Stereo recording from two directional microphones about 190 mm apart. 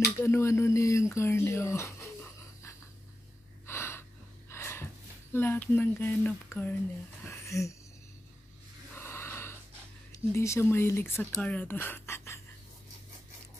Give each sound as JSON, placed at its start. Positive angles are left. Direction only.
{"t": 0.2, "sound": "speech", "side_deg": 15}
{"t": 3.6, "sound": "gasp", "side_deg": 15}
{"t": 5.3, "sound": "speech", "side_deg": 10}
{"t": 7.2, "sound": "a sound", "side_deg": 15}
{"t": 8.9, "sound": "snort", "side_deg": 10}
{"t": 10.3, "sound": "speech", "side_deg": 15}